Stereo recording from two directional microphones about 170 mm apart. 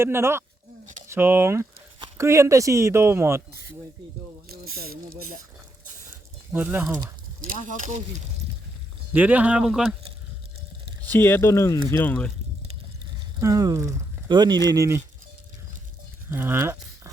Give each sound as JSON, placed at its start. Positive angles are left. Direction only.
{"t": 0.0, "sound": "speech", "side_deg": -15}
{"t": 4.4, "sound": "speech", "side_deg": -60}
{"t": 6.5, "sound": "speech", "side_deg": -10}
{"t": 7.4, "sound": "speech", "side_deg": -50}
{"t": 9.1, "sound": "speech", "side_deg": -10}
{"t": 11.0, "sound": "speech", "side_deg": 10}
{"t": 13.4, "sound": "speech", "side_deg": -20}
{"t": 16.3, "sound": "speech", "side_deg": -10}